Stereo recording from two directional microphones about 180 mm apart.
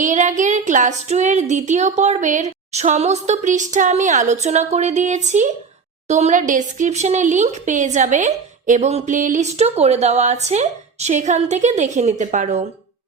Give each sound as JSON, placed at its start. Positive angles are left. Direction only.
{"t": 0.0, "sound": "speech", "side_deg": -45}